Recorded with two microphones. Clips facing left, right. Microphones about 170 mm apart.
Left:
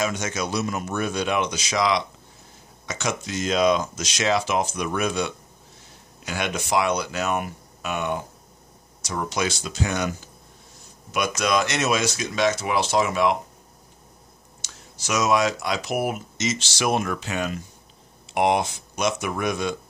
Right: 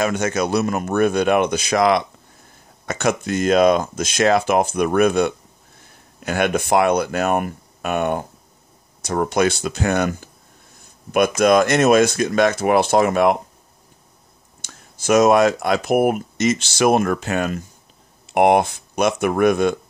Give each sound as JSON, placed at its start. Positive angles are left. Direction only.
{"t": 0.0, "sound": "speech", "side_deg": -60}
{"t": 14.6, "sound": "speech", "side_deg": -50}